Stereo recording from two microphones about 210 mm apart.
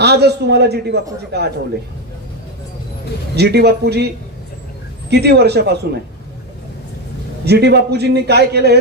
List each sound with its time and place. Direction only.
0.0 s a man's voice: 50° right (ahead or behind)
3.3 s a man's voice: 50° right (ahead or behind)
5.1 s a man's voice: 50° right (ahead or behind)
7.4 s a man's voice: 50° right (ahead or behind)